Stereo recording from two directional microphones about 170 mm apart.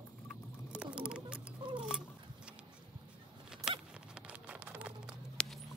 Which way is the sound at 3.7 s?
5° right (ahead or behind).